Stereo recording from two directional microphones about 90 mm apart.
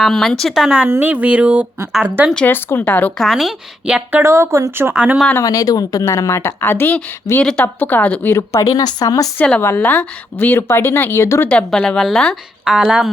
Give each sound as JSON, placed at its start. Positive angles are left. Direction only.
{"t": 0.0, "sound": "speech", "side_deg": 0}
{"t": 0.9, "sound": "speech", "side_deg": -20}
{"t": 2.5, "sound": "speech", "side_deg": 25}
{"t": 3.2, "sound": "speech", "side_deg": 0}
{"t": 4.1, "sound": "speech", "side_deg": -30}
{"t": 5.4, "sound": "speech", "side_deg": 40}
{"t": 6.1, "sound": "speech", "side_deg": 30}
{"t": 8.4, "sound": "speech", "side_deg": 35}
{"t": 9.6, "sound": "speech", "side_deg": 25}
{"t": 9.8, "sound": "a woman's voice", "side_deg": 15}
{"t": 11.5, "sound": "a woman's voice", "side_deg": 10}
{"t": 12.7, "sound": "speech", "side_deg": -10}